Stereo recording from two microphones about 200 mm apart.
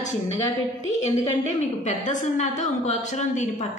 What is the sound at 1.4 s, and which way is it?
A woman's voice, 40° left (ahead or behind).